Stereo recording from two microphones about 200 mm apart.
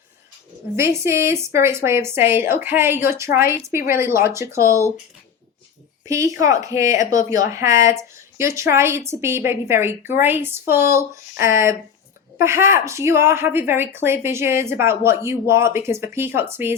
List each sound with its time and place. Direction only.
0.8 s a woman's voice: 15° right (ahead or behind)
6.1 s a woman's voice: 15° right (ahead or behind)